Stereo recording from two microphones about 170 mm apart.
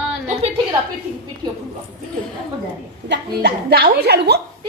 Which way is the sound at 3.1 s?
80° right.